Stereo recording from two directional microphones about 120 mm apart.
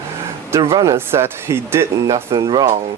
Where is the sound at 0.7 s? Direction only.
25° right (ahead or behind).